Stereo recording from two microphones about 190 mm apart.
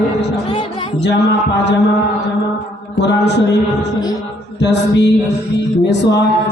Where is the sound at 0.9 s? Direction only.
65° left (ahead or behind).